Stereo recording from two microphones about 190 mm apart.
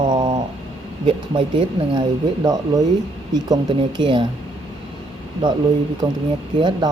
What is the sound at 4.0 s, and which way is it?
Speech, 25° right (ahead or behind).